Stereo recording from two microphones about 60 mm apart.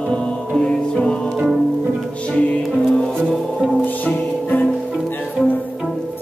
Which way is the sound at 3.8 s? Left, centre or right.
Left.